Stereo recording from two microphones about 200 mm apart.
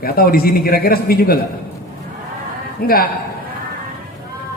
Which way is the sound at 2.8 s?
50° left (ahead or behind).